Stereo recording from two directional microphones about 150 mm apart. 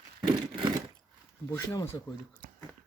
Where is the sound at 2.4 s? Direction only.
70° right (ahead or behind).